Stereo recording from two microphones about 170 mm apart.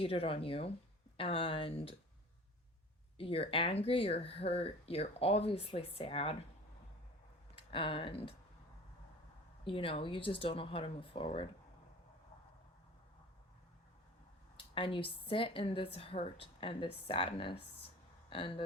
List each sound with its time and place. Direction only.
0.0 s speech: 35° left (ahead or behind)
3.2 s speech: 35° left (ahead or behind)
7.7 s speech: 30° left (ahead or behind)
9.6 s speech: 30° left (ahead or behind)
14.5 s speech: 30° left (ahead or behind)